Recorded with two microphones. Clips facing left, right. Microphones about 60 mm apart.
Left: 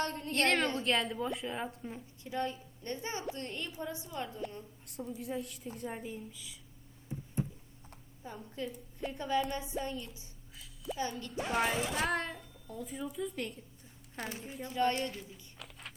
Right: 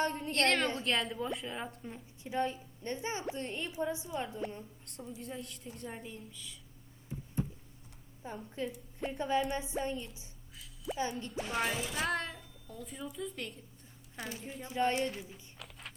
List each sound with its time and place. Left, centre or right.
0.0 s a woman's voice: right
0.3 s speech: centre
2.2 s a woman's voice: right
5.1 s a woman's voice: centre
8.2 s a woman's voice: right
10.5 s speech: centre
14.2 s speech: left
14.6 s a woman's voice: centre
15.5 s a sound: centre